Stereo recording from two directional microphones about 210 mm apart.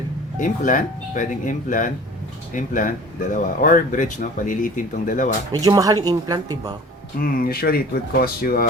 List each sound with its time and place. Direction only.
0.3 s speech: 40° left (ahead or behind)
5.6 s speech: 15° right (ahead or behind)
7.2 s speech: 45° left (ahead or behind)